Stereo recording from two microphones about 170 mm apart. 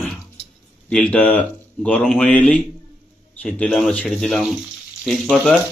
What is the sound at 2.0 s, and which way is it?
Speech, centre (ahead or behind).